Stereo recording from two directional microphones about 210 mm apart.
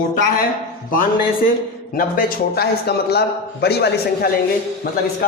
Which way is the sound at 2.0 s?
45° left (ahead or behind).